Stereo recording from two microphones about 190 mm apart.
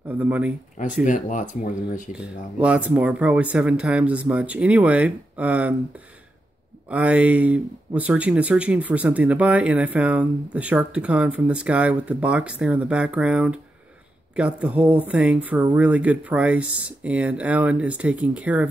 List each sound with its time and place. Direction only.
0.1 s speech: 10° right (ahead or behind)
1.0 s speech: 40° left (ahead or behind)
2.1 s speech: 5° right (ahead or behind)
6.9 s speech: 5° right (ahead or behind)